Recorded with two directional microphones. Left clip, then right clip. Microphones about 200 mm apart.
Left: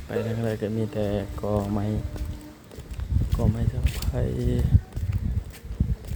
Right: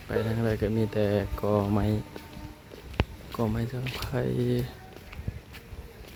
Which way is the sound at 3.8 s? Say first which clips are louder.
Right 1 dB; 55° left (ahead or behind).